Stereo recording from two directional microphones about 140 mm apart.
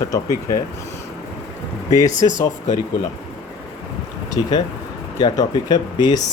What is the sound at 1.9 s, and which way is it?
Speech, 25° left (ahead or behind).